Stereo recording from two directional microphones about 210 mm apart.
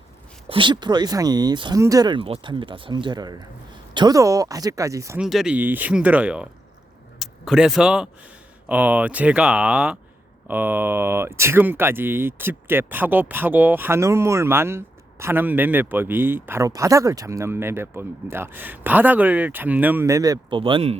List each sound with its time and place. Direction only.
0.4 s speech: 25° right (ahead or behind)
5.2 s speech: centre (ahead or behind); by 21.0 s 25° right (ahead or behind)